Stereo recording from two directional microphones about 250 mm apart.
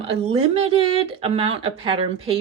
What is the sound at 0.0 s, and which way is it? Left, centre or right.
Speech, right.